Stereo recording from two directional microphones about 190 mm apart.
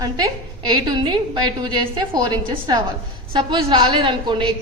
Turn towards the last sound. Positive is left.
turn(degrees=-25)  # may be behind; listen again after turning